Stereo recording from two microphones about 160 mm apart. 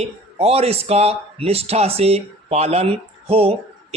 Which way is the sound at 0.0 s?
40° right (ahead or behind).